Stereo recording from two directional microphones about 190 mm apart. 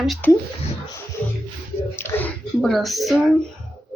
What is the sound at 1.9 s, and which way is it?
Speech, 10° left (ahead or behind).